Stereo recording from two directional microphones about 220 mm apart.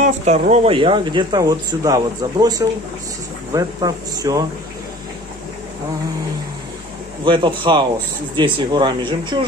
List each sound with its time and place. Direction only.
0.0 s speech: 35° right (ahead or behind); by 4.5 s 15° right (ahead or behind)
7.2 s speech: 20° right (ahead or behind)